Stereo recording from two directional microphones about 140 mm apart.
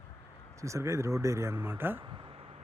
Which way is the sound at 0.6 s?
20° right (ahead or behind).